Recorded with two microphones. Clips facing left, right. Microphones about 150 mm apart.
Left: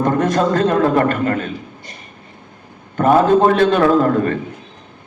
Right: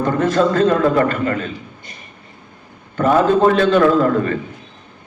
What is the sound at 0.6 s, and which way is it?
Speech, 45° left (ahead or behind).